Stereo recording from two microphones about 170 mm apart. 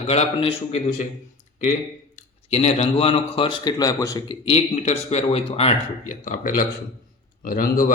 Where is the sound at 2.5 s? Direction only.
40° left (ahead or behind); by 4.4 s 20° left (ahead or behind).